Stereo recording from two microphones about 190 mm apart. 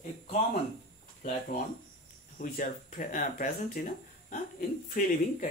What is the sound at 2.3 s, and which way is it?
Speech, 45° left (ahead or behind).